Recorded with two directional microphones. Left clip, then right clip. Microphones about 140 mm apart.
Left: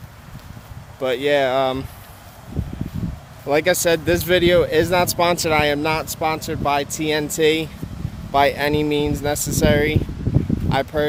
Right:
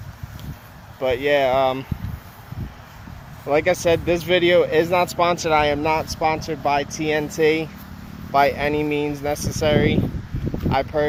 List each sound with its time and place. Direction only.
0.9 s speech: 25° left (ahead or behind)
3.4 s speech: 25° left (ahead or behind)
5.8 s speech: 15° left (ahead or behind)